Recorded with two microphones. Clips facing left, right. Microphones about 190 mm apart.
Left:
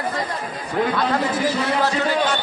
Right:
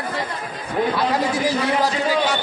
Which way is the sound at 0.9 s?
10° right (ahead or behind).